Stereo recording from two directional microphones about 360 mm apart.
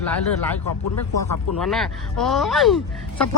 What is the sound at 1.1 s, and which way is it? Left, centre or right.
Speech, left.